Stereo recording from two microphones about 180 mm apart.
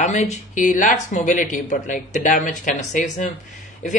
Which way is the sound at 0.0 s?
40° left (ahead or behind).